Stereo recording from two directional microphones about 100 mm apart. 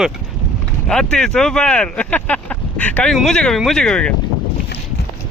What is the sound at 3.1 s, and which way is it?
Speech, 5° left (ahead or behind).